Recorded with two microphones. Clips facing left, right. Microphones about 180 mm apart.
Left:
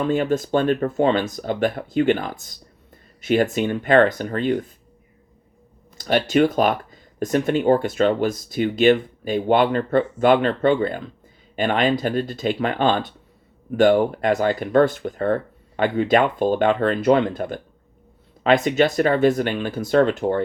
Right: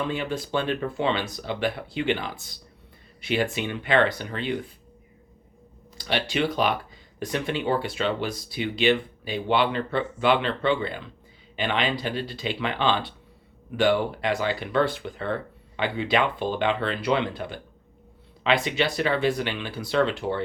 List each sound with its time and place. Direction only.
0.0 s speech: 45° left (ahead or behind)
6.0 s speech: 45° left (ahead or behind)